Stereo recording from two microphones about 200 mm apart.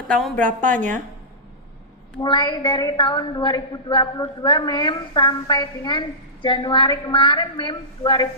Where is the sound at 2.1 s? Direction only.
20° left (ahead or behind).